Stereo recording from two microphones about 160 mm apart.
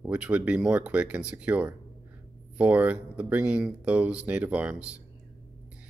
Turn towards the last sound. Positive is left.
turn(degrees=-10)  # may be behind; listen again after turning